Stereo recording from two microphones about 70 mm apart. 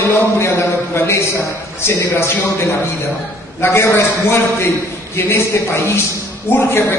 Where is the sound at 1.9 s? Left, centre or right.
Left.